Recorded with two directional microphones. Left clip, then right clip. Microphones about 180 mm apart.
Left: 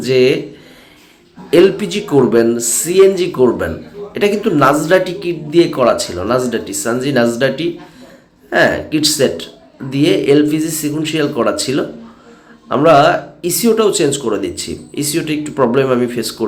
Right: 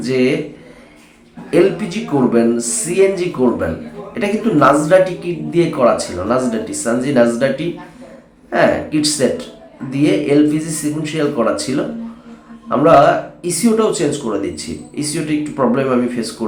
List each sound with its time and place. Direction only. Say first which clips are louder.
0.0 s speech: left 4 dB; 15° left (ahead or behind)
1.5 s speech: left 4 dB; 15° left (ahead or behind)
12.8 s speech: left 1 dB; 15° left (ahead or behind)